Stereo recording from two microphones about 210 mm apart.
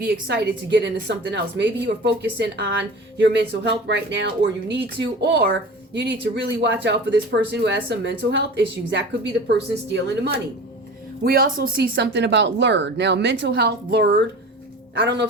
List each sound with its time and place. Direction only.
0.0 s a woman's voice: 50° right (ahead or behind)